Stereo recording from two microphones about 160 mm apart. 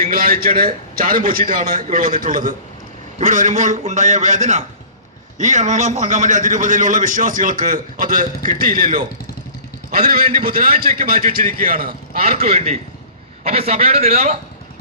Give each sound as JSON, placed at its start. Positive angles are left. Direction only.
{"t": 0.1, "sound": "a man's voice", "side_deg": -70}
{"t": 9.9, "sound": "a man's voice", "side_deg": -70}
{"t": 12.2, "sound": "a man's voice", "side_deg": -40}